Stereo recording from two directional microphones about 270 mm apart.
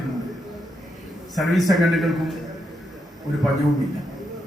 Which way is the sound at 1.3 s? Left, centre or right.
Centre.